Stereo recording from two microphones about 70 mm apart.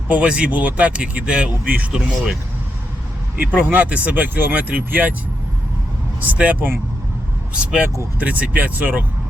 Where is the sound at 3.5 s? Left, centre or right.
Right.